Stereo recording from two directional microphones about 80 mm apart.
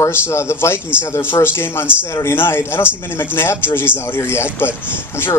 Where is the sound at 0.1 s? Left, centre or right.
Left.